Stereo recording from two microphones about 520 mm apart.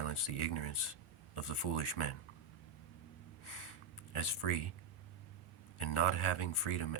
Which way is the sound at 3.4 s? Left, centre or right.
Left.